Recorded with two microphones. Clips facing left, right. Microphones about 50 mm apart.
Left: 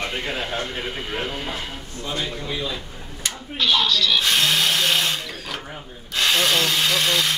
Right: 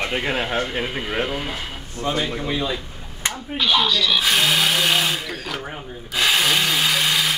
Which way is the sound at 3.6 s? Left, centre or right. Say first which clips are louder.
Right 1 dB; centre.